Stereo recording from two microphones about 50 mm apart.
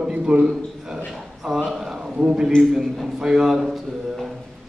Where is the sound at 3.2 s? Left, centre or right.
Centre.